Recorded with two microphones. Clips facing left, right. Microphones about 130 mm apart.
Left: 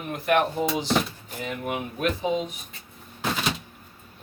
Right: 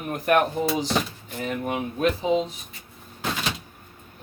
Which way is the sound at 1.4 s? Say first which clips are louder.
Right 3 dB; 35° right (ahead or behind).